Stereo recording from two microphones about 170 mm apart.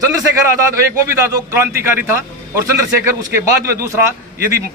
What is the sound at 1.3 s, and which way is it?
A man's voice, 15° right (ahead or behind).